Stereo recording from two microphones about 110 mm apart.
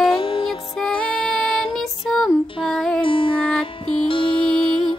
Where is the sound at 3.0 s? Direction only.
55° left (ahead or behind).